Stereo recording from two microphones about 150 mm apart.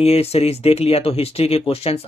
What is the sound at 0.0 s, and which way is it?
Speech, 40° left (ahead or behind).